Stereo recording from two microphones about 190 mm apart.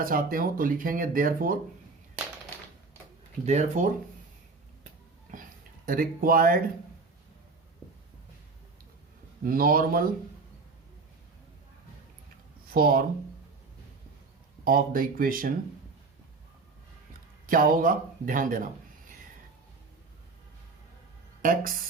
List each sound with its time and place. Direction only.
0.0 s speech: 50° right (ahead or behind)
3.4 s speech: 40° right (ahead or behind)
5.8 s speech: 50° right (ahead or behind)
9.4 s speech: 50° right (ahead or behind)
12.7 s speech: 50° right (ahead or behind)
14.6 s speech: 50° right (ahead or behind)
17.4 s speech: 45° right (ahead or behind)
21.4 s speech: 45° right (ahead or behind)